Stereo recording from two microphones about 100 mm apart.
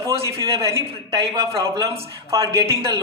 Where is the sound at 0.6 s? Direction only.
30° right (ahead or behind).